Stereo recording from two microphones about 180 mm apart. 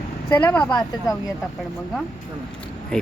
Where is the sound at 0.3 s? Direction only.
10° left (ahead or behind).